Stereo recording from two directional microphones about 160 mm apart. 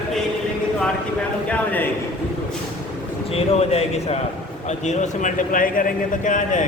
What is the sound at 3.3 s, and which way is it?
A man's voice, 40° left (ahead or behind).